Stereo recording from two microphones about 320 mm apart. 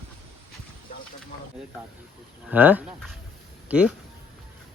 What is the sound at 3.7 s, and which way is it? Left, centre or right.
Speech, centre.